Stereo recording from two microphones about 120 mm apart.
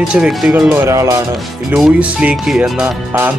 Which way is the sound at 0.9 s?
25° right (ahead or behind).